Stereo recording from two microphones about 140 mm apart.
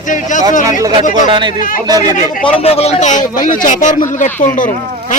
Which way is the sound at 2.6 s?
45° left (ahead or behind).